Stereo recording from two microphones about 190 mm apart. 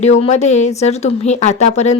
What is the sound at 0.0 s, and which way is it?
Speech, 35° left (ahead or behind).